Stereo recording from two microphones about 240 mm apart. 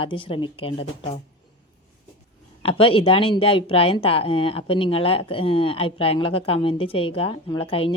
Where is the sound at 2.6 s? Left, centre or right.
Left.